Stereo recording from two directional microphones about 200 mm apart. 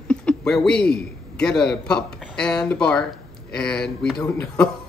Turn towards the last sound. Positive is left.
turn(degrees=5)  # may be behind; listen again after turning